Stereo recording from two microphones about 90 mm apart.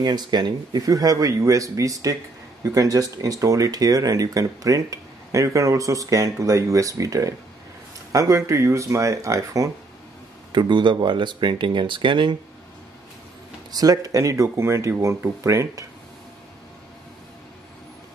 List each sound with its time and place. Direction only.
0.0 s speech: 50° right (ahead or behind)
10.5 s speech: 60° right (ahead or behind)
13.7 s speech: 45° right (ahead or behind)